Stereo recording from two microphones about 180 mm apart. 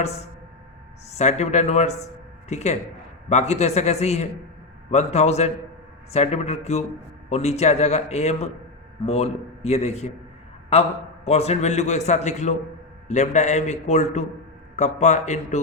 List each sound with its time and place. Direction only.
1.1 s a man's voice: 40° left (ahead or behind)